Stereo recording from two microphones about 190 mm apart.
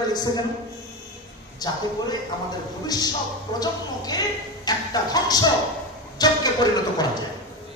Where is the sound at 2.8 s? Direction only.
20° left (ahead or behind).